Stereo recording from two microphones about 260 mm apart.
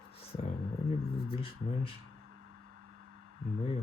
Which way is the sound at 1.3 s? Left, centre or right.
Left.